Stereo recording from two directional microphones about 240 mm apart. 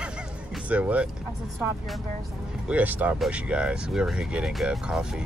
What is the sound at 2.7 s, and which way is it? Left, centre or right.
Speech, centre.